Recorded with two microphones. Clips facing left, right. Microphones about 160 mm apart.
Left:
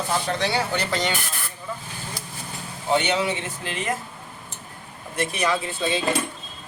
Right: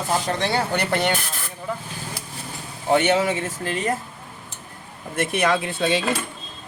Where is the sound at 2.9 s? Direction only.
50° right (ahead or behind).